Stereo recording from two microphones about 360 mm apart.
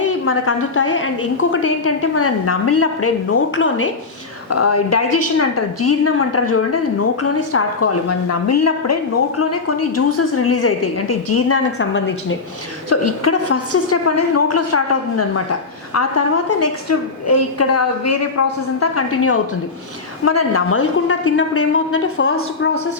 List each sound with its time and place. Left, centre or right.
0.3 s a woman's voice: left
12.9 s a woman's voice: left